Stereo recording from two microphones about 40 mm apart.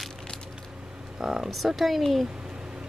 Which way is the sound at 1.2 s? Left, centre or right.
Centre.